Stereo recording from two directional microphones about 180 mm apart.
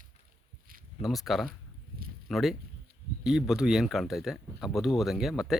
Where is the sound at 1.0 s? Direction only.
Centre (ahead or behind).